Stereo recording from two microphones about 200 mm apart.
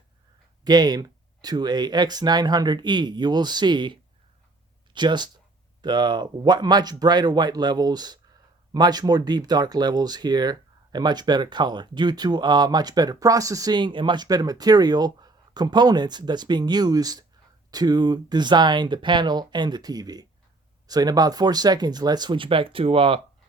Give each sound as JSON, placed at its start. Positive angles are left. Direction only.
{"t": 0.6, "sound": "speech", "side_deg": -20}
{"t": 4.9, "sound": "speech", "side_deg": -20}